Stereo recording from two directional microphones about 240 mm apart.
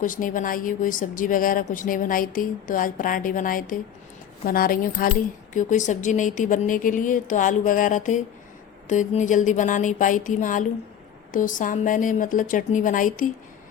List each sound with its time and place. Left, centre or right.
0.0 s speech: left